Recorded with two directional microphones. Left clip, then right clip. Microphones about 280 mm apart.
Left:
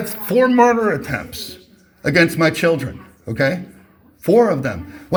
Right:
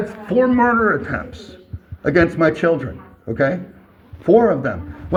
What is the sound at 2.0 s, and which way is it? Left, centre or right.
Speech, left.